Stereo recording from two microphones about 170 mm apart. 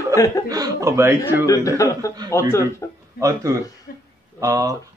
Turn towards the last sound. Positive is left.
turn(degrees=-20)  # may be behind; listen again after turning